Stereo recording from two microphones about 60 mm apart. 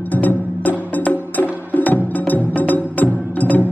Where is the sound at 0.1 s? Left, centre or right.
Left.